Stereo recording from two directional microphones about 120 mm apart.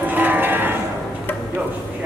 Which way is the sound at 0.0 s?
15° right (ahead or behind).